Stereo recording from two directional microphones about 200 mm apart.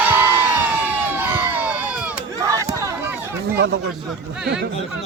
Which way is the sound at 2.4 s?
15° right (ahead or behind).